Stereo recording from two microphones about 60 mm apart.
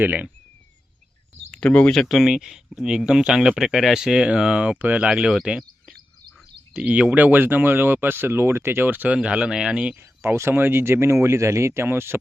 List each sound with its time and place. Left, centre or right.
0.0 s speech: right
1.5 s a sound: left
2.0 s speech: centre; by 5.0 s right
5.0 s speech: centre
6.7 s speech: right
9.1 s speech: centre
10.5 s speech: right